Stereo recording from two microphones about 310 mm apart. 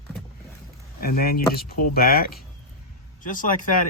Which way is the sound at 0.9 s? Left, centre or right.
Left.